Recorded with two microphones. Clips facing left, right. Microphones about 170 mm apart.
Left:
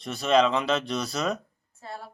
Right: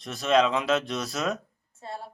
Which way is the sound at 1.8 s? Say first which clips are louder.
Right 2 dB; 25° right (ahead or behind).